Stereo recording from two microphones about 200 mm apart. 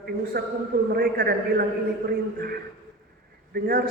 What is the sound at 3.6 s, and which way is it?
Speech, 45° right (ahead or behind).